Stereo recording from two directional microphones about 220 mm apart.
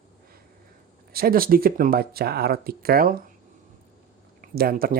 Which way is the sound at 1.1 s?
40° right (ahead or behind).